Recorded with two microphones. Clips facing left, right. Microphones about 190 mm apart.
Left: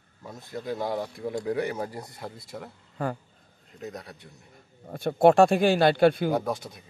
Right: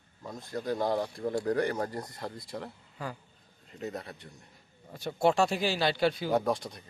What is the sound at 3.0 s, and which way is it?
Speech, 55° left (ahead or behind).